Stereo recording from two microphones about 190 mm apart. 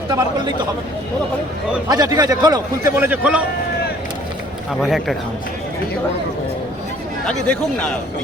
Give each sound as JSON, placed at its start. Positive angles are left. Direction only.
{"t": 0.1, "sound": "a man's voice", "side_deg": -25}
{"t": 1.9, "sound": "a man's voice", "side_deg": -20}
{"t": 4.8, "sound": "speech", "side_deg": 0}
{"t": 7.3, "sound": "speech", "side_deg": 5}